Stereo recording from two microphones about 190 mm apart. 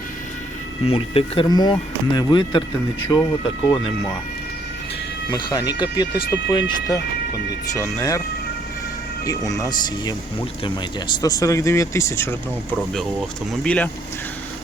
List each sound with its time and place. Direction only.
0.9 s speech: 30° left (ahead or behind)
5.3 s speech: 20° left (ahead or behind)
9.2 s speech: 20° left (ahead or behind)
11.2 s speech: 20° left (ahead or behind)
13.5 s speech: 5° left (ahead or behind)